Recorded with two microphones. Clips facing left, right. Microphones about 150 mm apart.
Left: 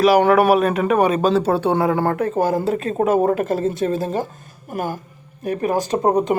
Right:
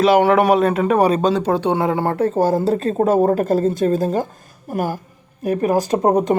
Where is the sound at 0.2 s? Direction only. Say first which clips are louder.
Even; 20° right (ahead or behind).